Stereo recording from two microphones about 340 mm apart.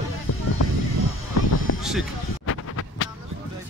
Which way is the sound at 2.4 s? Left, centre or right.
Left.